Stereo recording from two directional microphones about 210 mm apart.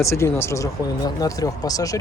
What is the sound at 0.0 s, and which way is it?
Speech, 15° left (ahead or behind).